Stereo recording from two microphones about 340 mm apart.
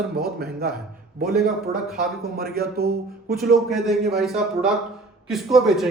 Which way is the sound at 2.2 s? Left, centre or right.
Right.